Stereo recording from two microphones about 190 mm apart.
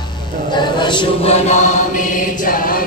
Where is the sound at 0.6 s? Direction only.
25° left (ahead or behind).